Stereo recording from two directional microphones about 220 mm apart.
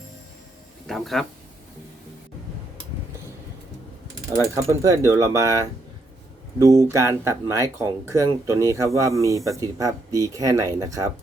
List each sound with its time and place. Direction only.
0.9 s speech: centre (ahead or behind)
4.3 s speech: 15° right (ahead or behind)
6.6 s speech: 15° right (ahead or behind)